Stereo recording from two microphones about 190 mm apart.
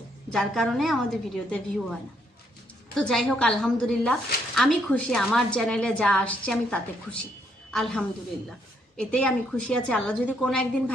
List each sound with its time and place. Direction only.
0.3 s a woman's voice: centre (ahead or behind)
2.9 s a woman's voice: centre (ahead or behind)